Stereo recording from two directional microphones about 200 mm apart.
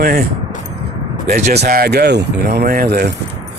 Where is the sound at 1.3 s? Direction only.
50° right (ahead or behind).